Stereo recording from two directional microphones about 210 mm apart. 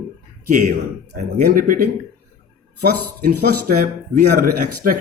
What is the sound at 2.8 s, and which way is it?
Speech, 90° right.